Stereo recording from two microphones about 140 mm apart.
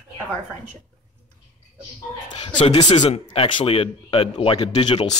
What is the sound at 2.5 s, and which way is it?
Speech, 45° left (ahead or behind).